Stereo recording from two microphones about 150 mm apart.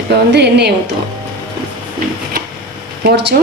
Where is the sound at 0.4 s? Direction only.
90° right.